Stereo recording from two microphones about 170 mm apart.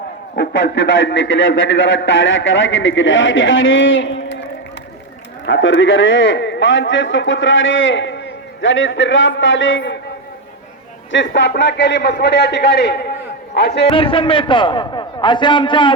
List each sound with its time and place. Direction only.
0.3 s a man's voice: 90° left
5.5 s a man's voice: 90° left
11.1 s a man's voice: 90° left; by 13.8 s 75° left (ahead or behind)
13.8 s a man's voice: 30° left (ahead or behind)